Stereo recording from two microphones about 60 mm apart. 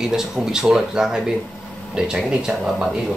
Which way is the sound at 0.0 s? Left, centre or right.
Centre.